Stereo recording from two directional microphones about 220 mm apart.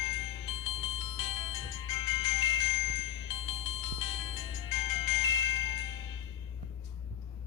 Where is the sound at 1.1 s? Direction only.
20° left (ahead or behind).